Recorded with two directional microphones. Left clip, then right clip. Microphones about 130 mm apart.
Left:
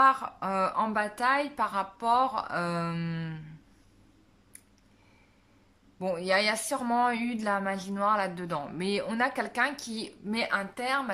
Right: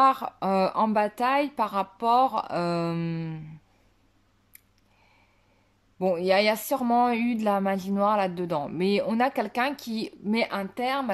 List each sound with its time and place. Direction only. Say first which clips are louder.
0.0 s speech: right 2 dB; 35° right (ahead or behind)
5.9 s speech: right 5 dB; 30° right (ahead or behind)